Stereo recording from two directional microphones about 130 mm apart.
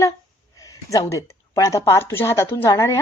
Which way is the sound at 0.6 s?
25° left (ahead or behind).